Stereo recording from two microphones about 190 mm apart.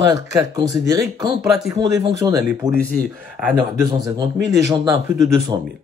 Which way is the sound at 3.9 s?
20° right (ahead or behind).